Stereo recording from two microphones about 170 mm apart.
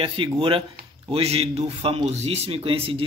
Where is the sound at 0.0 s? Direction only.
30° right (ahead or behind).